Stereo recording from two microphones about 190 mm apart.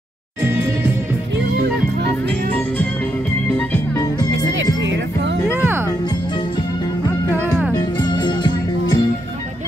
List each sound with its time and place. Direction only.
3.5 s music: 10° left (ahead or behind)
5.5 s music: 10° right (ahead or behind)
7.7 s music: 20° left (ahead or behind)